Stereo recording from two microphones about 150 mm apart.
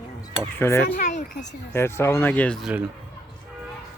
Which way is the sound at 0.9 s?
60° left (ahead or behind).